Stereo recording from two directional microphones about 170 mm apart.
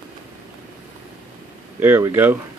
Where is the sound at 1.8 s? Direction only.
15° right (ahead or behind).